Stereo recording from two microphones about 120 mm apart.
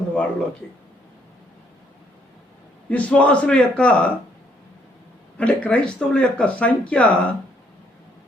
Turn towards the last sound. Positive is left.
turn(degrees=10)  # may be behind; listen again after turning